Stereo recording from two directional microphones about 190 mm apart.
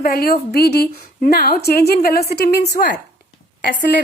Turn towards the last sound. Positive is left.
turn(degrees=50)  # may be behind; listen again after turning